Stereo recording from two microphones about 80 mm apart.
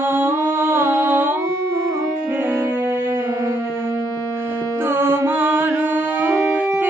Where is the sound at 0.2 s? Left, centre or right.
Right.